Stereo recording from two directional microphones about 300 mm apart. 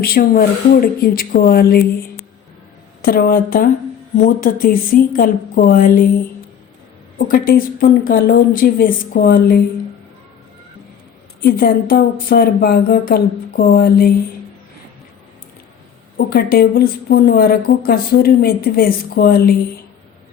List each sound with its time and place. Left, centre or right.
0.0 s a woman's voice: left
3.0 s a woman's voice: left
7.2 s a woman's voice: left
11.4 s speech: left
16.1 s a woman's voice: left